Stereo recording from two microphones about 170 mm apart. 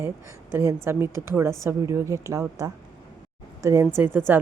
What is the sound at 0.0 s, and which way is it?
Speech, 15° right (ahead or behind).